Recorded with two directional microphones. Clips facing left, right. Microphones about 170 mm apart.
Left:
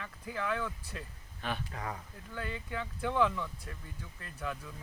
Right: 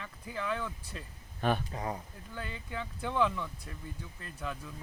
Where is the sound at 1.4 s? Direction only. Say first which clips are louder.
Right 7 dB; 50° right (ahead or behind).